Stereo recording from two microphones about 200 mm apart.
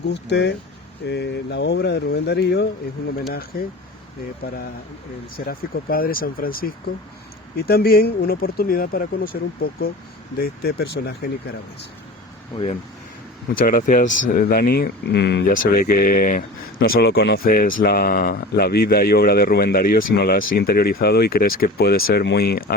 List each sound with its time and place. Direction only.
0.0 s speech: 60° left (ahead or behind)
5.5 s speech: 45° left (ahead or behind)
13.5 s speech: 45° left (ahead or behind)